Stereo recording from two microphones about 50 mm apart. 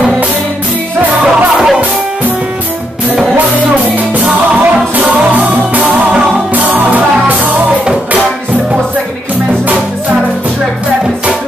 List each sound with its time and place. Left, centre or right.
1.2 s music: centre
4.1 s music: right
6.5 s music: right